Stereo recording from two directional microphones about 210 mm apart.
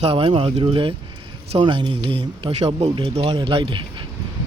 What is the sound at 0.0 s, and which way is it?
Speech, 25° right (ahead or behind).